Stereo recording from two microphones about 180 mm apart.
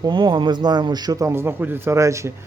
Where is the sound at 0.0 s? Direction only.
25° right (ahead or behind).